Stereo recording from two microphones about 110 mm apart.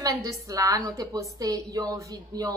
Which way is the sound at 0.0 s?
30° right (ahead or behind).